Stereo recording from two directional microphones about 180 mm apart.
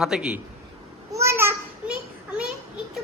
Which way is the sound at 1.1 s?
15° right (ahead or behind).